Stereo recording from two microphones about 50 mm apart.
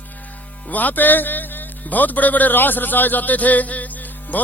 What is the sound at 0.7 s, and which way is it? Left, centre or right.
A man's voice, left.